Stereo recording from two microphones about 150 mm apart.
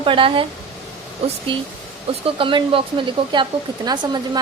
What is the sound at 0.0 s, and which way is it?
Speech, 35° right (ahead or behind).